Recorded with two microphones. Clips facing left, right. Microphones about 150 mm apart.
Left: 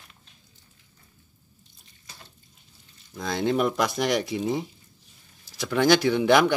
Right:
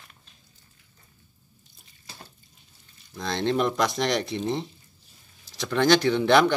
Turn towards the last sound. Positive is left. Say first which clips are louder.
# even
turn(degrees=10)  # may be behind; listen again after turning